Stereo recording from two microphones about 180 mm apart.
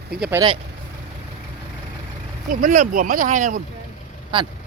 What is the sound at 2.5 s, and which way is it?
Speech, 45° right (ahead or behind).